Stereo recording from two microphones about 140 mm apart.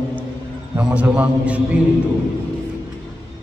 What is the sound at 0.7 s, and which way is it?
A man's voice, 10° right (ahead or behind).